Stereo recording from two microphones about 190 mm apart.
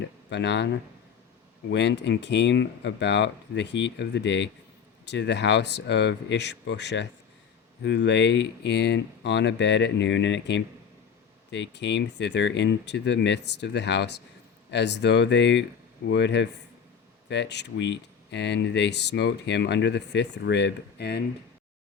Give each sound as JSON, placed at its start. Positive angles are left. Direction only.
{"t": 0.3, "sound": "speech", "side_deg": 65}